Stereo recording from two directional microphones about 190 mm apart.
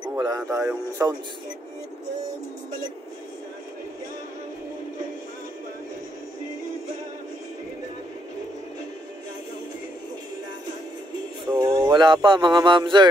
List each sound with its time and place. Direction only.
0.2 s speech: 20° right (ahead or behind)
11.4 s music: 20° right (ahead or behind)
11.8 s speech: 25° right (ahead or behind)